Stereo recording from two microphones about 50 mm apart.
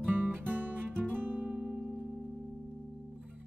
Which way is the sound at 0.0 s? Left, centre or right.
Right.